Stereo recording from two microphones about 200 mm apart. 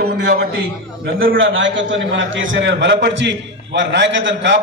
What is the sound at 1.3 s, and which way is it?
A man's voice, 70° right (ahead or behind).